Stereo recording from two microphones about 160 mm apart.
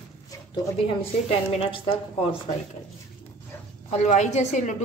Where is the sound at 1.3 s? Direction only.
40° left (ahead or behind).